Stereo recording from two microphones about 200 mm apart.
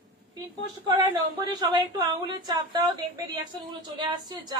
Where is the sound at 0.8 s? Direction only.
20° right (ahead or behind).